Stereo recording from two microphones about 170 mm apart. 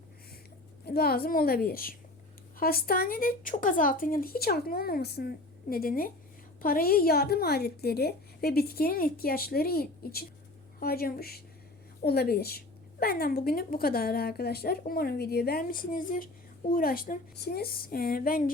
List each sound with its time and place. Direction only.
0.9 s a woman's voice: 65° left (ahead or behind)